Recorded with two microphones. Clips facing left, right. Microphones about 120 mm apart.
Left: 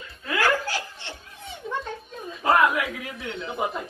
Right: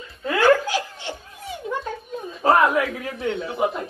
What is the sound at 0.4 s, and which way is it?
Laughter, 15° right (ahead or behind).